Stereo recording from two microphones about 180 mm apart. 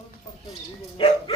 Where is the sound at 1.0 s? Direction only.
30° left (ahead or behind).